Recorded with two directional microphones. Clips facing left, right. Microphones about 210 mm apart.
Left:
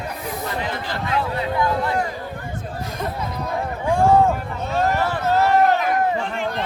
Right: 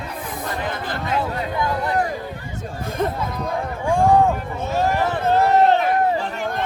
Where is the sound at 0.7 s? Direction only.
50° right (ahead or behind).